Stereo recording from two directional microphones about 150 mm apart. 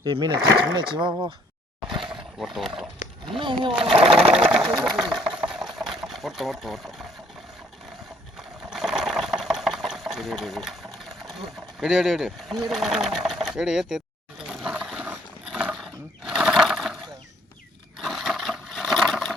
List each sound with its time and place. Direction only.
0.0 s speech: 30° right (ahead or behind)
0.3 s speech: 15° right (ahead or behind)
0.8 s speech: 30° right (ahead or behind)
2.0 s a sound: 5° right (ahead or behind)
3.2 s speech: 35° right (ahead or behind)
4.4 s speech: 5° right (ahead or behind)
5.4 s water: 5° right (ahead or behind)
8.4 s sewing machine: 5° right (ahead or behind)
10.9 s a sound: centre (ahead or behind)
18.0 s a sound: centre (ahead or behind)